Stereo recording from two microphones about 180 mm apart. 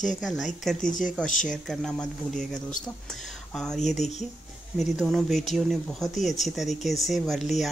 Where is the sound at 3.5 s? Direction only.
Centre (ahead or behind).